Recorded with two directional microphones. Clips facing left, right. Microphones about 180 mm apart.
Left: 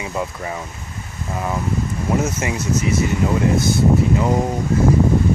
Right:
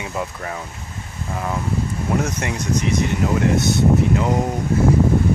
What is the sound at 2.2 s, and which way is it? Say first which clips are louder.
Speech: left 2 dB; 5° left (ahead or behind).